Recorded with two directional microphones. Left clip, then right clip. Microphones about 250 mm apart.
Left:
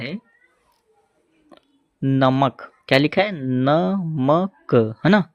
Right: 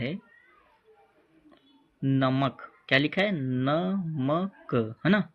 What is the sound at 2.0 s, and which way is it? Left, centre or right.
Speech, left.